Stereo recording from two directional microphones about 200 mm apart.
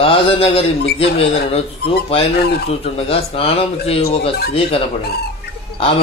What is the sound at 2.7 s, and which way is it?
Speech, 30° left (ahead or behind).